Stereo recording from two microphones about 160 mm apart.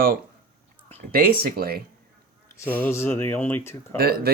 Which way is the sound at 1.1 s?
70° right (ahead or behind).